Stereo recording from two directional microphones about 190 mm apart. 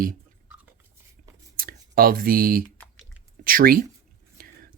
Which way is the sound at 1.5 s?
50° right (ahead or behind).